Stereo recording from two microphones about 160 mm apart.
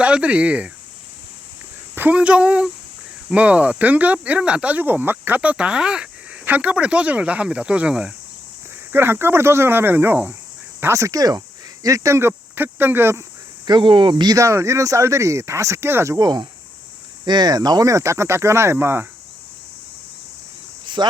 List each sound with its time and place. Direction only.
0.0 s speech: 5° right (ahead or behind)
2.0 s speech: 10° right (ahead or behind)
13.7 s speech: 30° right (ahead or behind); by 19.0 s 15° right (ahead or behind)
20.8 s cricket: 30° right (ahead or behind)